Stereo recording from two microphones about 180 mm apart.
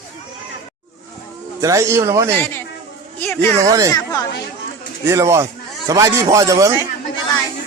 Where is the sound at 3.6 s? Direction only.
20° right (ahead or behind).